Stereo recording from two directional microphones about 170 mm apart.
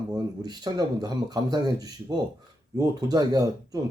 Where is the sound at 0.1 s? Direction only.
25° right (ahead or behind).